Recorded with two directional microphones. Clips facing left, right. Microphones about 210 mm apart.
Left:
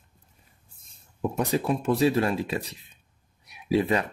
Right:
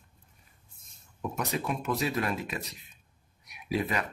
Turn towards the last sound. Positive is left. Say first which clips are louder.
# left 7 dB
turn(degrees=30)  # may be behind; listen again after turning